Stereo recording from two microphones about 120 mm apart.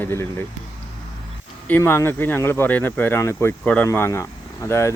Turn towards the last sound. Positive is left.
turn(degrees=25)  # may be behind; listen again after turning